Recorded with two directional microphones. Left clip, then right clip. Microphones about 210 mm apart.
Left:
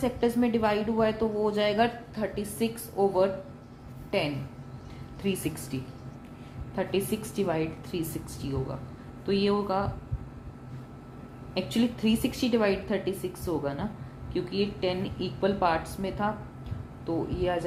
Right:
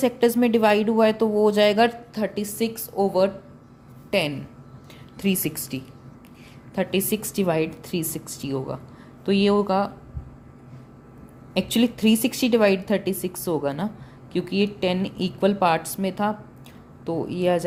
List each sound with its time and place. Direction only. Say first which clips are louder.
0.0 s speech: right 7 dB; 55° right (ahead or behind)
5.2 s a woman's voice: right 5 dB; 45° right (ahead or behind)
11.5 s speech: right 6 dB; 60° right (ahead or behind)